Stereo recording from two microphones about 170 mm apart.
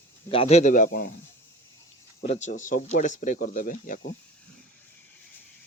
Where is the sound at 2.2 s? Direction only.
40° left (ahead or behind).